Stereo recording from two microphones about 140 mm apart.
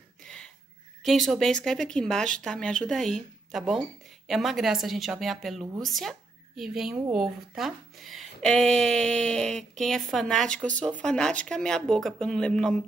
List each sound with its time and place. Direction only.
1.0 s speech: centre (ahead or behind)